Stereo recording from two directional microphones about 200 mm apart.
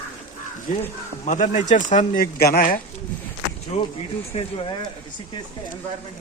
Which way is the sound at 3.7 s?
35° left (ahead or behind).